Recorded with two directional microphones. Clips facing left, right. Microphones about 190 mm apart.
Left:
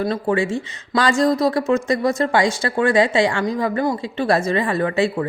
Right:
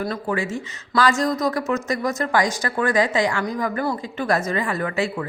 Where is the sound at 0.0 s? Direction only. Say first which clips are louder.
Left 5 dB; 25° left (ahead or behind).